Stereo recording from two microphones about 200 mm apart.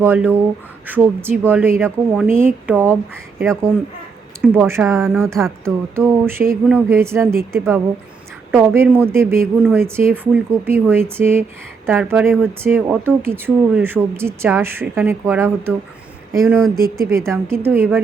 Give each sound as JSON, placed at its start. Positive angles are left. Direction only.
{"t": 0.0, "sound": "speech", "side_deg": -10}
{"t": 4.5, "sound": "speech", "side_deg": -10}
{"t": 4.9, "sound": "speech", "side_deg": 0}
{"t": 5.9, "sound": "speech", "side_deg": -10}